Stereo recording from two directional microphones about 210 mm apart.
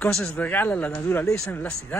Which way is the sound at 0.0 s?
5° left (ahead or behind).